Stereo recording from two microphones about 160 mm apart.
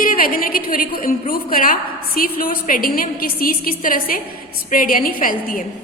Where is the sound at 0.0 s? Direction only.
60° left (ahead or behind).